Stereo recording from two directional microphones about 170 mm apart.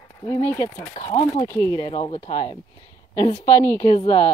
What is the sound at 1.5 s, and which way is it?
Speech, 20° left (ahead or behind).